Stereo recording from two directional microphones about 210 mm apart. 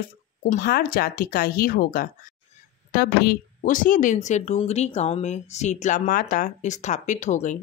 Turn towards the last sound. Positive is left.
turn(degrees=35)  # may be behind; listen again after turning